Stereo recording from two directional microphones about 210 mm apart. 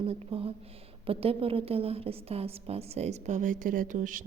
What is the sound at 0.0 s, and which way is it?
A woman's voice, 25° right (ahead or behind).